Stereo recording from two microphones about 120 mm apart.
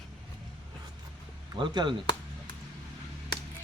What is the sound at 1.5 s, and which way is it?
Speech, 40° right (ahead or behind).